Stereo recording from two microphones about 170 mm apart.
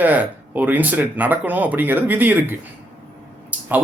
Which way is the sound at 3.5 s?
10° right (ahead or behind).